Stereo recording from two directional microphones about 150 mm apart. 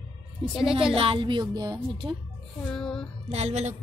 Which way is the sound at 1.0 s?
35° right (ahead or behind).